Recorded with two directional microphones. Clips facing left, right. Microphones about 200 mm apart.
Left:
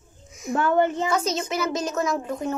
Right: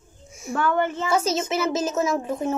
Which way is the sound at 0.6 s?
20° left (ahead or behind).